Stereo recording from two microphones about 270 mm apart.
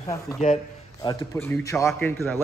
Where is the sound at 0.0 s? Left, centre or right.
Centre.